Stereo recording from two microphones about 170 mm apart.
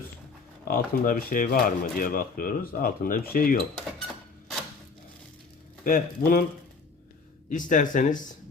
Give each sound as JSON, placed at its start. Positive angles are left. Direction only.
{"t": 0.7, "sound": "speech", "side_deg": 55}
{"t": 5.8, "sound": "speech", "side_deg": 55}
{"t": 7.5, "sound": "speech", "side_deg": 50}